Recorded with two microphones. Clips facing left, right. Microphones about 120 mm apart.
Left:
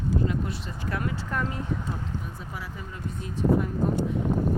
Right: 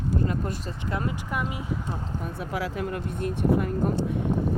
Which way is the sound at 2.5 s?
85° right.